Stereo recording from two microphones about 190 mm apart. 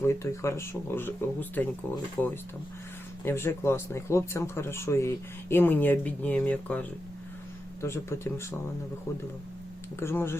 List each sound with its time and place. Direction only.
0.0 s speech: 15° left (ahead or behind)
10.0 s speech: 15° left (ahead or behind)